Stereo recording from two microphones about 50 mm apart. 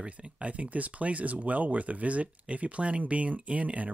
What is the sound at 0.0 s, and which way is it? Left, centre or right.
Speech, right.